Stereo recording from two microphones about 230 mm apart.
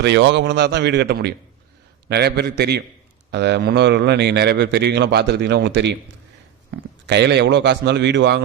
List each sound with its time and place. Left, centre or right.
0.0 s a man's voice: right
7.1 s a man's voice: right